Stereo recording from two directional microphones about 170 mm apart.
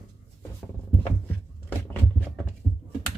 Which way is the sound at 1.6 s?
10° left (ahead or behind).